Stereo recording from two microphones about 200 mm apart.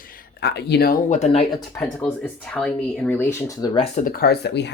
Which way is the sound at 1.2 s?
30° left (ahead or behind).